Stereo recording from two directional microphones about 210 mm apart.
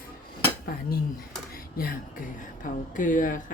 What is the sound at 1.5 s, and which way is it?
A woman's voice, 45° left (ahead or behind).